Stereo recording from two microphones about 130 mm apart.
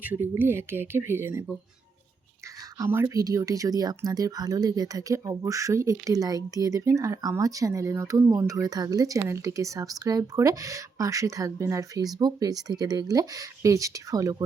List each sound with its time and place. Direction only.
0.0 s speech: 15° right (ahead or behind)
2.7 s speech: 20° right (ahead or behind)